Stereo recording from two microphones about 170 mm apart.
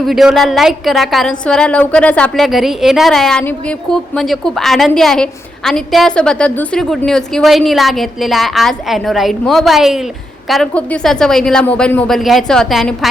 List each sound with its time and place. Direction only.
0.0 s a woman's voice: centre (ahead or behind)